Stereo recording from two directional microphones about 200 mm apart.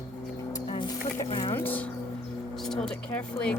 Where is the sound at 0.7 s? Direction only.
25° left (ahead or behind).